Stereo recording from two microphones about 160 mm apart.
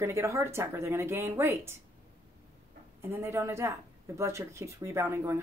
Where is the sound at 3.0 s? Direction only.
15° right (ahead or behind).